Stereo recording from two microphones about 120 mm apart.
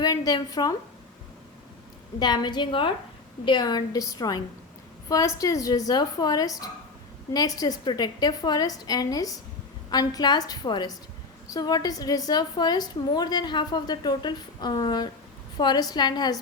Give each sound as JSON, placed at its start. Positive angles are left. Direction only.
{"t": 0.0, "sound": "a woman's voice", "side_deg": 30}
{"t": 2.1, "sound": "a woman's voice", "side_deg": 35}